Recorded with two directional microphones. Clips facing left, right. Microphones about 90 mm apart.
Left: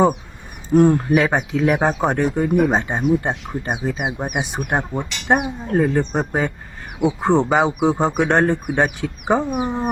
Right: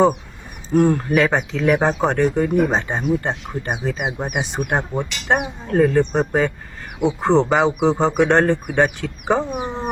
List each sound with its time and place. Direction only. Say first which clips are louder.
0.7 s speech: left 2 dB; 15° left (ahead or behind)